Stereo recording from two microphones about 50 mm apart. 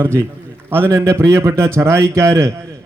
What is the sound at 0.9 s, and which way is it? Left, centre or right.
A man's voice, right.